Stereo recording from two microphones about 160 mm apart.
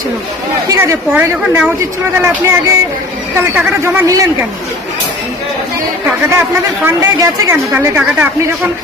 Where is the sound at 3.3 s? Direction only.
10° right (ahead or behind).